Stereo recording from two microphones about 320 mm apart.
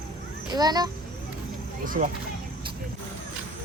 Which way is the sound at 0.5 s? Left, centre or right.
Centre.